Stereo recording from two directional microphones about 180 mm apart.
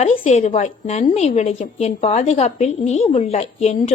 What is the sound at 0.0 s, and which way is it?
A woman's voice, 40° left (ahead or behind).